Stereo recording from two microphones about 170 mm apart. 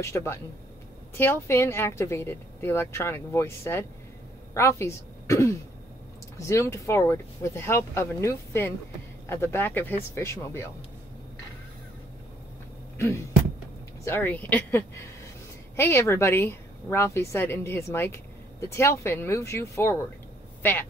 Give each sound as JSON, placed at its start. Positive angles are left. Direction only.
{"t": 0.0, "sound": "a woman's voice", "side_deg": 15}
{"t": 12.9, "sound": "a sound", "side_deg": 15}
{"t": 14.0, "sound": "a woman's voice", "side_deg": 10}